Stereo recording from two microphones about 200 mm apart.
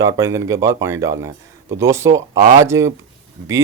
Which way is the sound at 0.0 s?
15° right (ahead or behind).